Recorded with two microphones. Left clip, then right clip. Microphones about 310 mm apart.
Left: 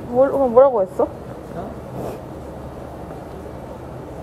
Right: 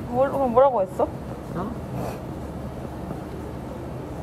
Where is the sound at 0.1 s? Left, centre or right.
Left.